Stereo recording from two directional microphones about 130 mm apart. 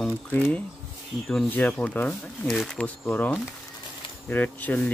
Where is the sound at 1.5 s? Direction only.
15° left (ahead or behind).